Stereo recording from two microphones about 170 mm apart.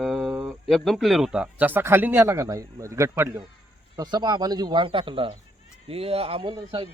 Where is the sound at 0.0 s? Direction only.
Centre (ahead or behind).